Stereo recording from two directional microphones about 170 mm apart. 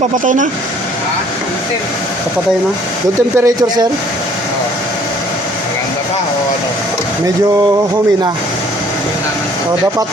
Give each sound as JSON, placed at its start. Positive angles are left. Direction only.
{"t": 3.3, "sound": "speech", "side_deg": -20}